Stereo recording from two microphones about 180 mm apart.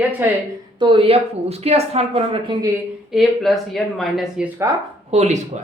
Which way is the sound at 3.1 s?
Centre (ahead or behind).